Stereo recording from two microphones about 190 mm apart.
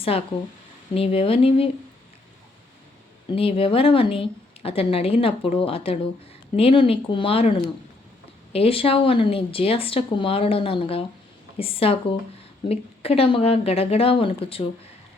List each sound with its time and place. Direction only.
0.1 s speech: 30° left (ahead or behind)
3.2 s speech: 30° left (ahead or behind)